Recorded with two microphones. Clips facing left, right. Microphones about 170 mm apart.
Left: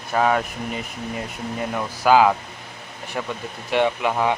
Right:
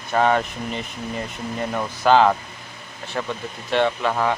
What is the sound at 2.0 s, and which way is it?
Speech, 5° left (ahead or behind).